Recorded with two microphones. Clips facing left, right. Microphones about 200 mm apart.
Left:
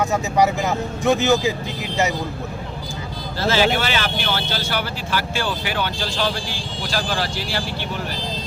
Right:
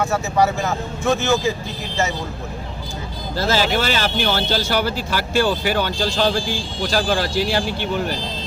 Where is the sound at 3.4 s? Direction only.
40° right (ahead or behind).